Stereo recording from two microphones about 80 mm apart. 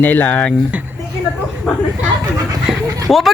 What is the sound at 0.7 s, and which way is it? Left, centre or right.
Speech, centre.